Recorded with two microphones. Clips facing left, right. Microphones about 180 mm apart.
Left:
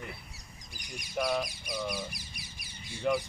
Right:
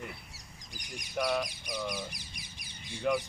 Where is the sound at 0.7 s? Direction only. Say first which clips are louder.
Even; 15° right (ahead or behind).